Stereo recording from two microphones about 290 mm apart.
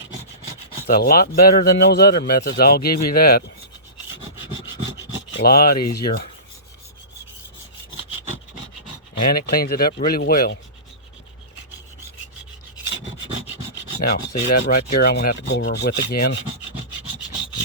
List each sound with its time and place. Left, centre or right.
0.9 s a man's voice: left
5.4 s a man's voice: left
9.3 s a man's voice: left
14.0 s a man's voice: left